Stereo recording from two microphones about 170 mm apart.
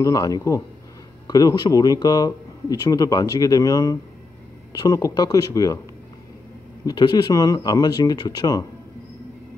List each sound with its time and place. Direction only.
0.0 s speech: 20° left (ahead or behind)
6.9 s speech: 25° left (ahead or behind)